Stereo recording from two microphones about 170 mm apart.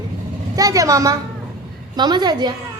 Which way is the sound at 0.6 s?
20° right (ahead or behind).